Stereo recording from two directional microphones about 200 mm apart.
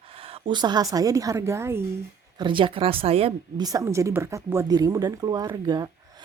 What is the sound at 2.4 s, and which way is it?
A woman's voice, 25° right (ahead or behind).